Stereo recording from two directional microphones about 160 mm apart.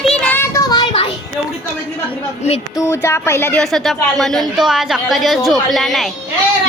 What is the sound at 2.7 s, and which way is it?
Speech, 15° left (ahead or behind).